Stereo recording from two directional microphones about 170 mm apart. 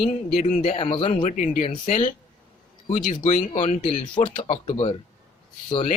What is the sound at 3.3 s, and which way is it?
Speech, 40° left (ahead or behind).